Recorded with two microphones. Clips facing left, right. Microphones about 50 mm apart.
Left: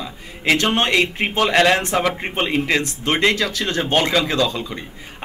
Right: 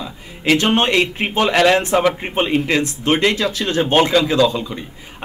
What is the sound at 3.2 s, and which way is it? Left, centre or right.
Speech, centre.